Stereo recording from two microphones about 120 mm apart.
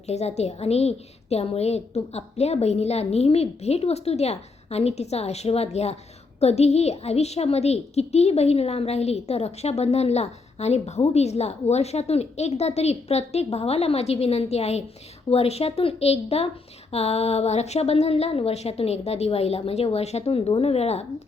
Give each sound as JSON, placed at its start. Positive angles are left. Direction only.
{"t": 0.1, "sound": "a woman's voice", "side_deg": 65}